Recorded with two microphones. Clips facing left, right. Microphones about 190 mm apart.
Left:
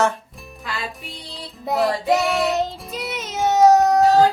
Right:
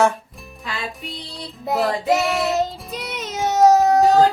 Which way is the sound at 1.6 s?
Centre (ahead or behind).